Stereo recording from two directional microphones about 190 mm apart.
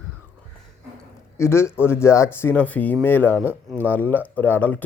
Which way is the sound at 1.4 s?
15° left (ahead or behind).